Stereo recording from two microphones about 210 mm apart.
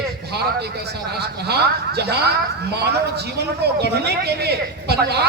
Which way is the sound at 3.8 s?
50° right (ahead or behind).